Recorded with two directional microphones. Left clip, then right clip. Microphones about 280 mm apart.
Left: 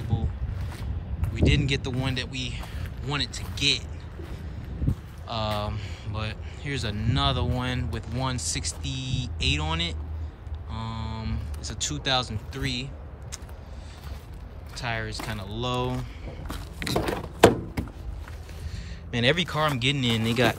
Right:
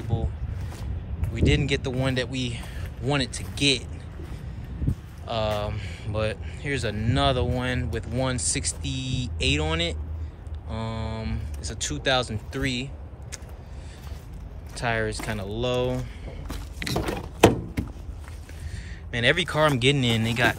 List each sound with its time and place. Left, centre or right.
0.1 s zipper: centre
1.3 s speech: centre
5.2 s speech: centre
14.8 s speech: centre
16.8 s a sound: left
19.0 s speech: centre